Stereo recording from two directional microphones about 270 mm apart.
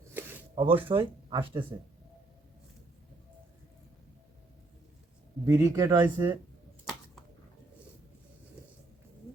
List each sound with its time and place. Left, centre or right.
0.1 s a sound: centre
0.5 s speech: centre
5.5 s speech: centre